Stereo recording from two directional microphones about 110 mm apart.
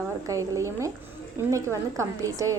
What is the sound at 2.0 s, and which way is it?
Speech, 30° right (ahead or behind).